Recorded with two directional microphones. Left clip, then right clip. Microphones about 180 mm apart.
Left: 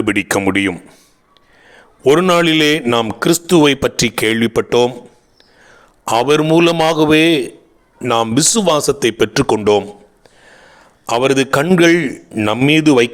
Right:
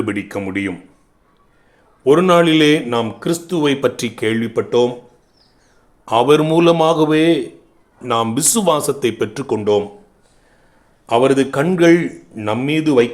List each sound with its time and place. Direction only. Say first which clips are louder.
0.0 s a man's voice: left 7 dB; 45° left (ahead or behind)
6.1 s a man's voice: even; 30° left (ahead or behind)
8.0 s a man's voice: left 3 dB; 35° left (ahead or behind)
8.4 s speech: left 3 dB; 25° left (ahead or behind)
9.6 s a man's voice: even; 50° left (ahead or behind)
10.5 s a sound: left 11 dB; 45° left (ahead or behind)
11.7 s a man's voice: even; 35° left (ahead or behind)